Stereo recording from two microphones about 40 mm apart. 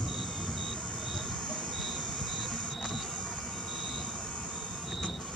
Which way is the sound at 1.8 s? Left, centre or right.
Centre.